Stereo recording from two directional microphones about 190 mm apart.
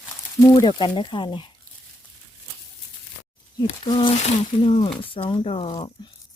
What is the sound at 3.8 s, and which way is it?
Speech, 25° left (ahead or behind).